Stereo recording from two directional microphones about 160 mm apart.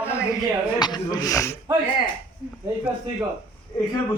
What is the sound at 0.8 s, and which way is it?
Speech, 25° left (ahead or behind).